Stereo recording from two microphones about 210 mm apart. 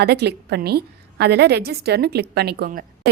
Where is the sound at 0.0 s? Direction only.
50° right (ahead or behind).